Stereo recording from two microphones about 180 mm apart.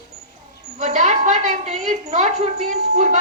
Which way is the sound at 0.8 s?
40° right (ahead or behind).